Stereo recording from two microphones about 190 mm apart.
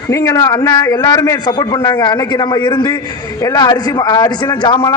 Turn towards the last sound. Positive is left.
turn(degrees=25)  # may be behind; listen again after turning